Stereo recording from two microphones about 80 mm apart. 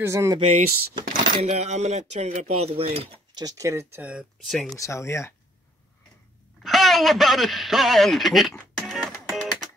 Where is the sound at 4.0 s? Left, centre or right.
Centre.